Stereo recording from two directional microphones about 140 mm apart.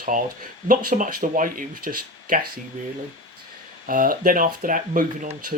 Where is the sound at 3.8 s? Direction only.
80° right.